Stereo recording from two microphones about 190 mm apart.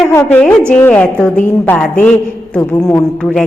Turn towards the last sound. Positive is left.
turn(degrees=5)  # may be behind; listen again after turning